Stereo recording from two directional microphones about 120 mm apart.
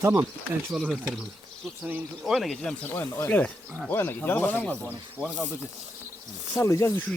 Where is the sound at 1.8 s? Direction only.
15° right (ahead or behind).